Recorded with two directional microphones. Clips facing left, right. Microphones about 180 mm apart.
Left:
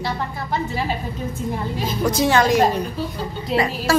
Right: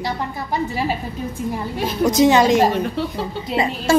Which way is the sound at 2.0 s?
20° right (ahead or behind).